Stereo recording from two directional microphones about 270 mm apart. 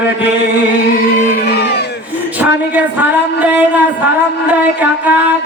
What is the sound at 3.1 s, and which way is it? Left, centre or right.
Music, centre.